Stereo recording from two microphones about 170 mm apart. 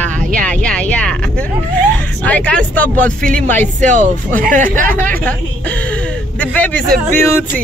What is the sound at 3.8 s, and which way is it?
Speech, 45° right (ahead or behind).